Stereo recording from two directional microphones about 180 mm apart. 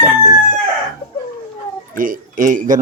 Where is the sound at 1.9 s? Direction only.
50° right (ahead or behind).